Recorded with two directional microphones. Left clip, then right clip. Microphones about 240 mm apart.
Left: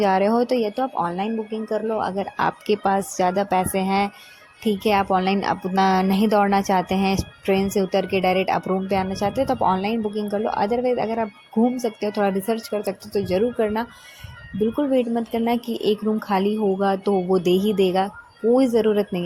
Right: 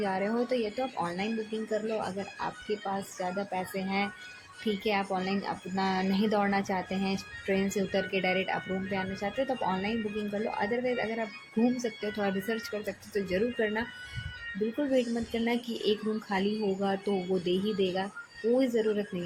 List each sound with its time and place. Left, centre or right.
0.0 s a woman's voice: left
14.9 s speech: left